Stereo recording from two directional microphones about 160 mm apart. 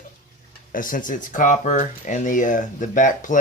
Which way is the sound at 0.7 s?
60° left (ahead or behind).